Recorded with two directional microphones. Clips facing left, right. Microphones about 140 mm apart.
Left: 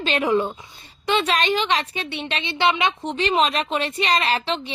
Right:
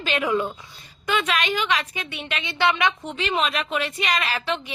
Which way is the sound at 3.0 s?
35° left (ahead or behind).